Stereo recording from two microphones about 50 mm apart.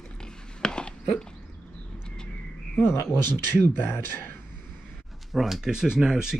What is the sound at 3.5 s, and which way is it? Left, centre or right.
Speech, left.